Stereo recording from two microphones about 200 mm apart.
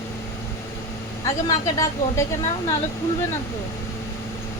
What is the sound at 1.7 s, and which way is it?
Speech, 15° left (ahead or behind).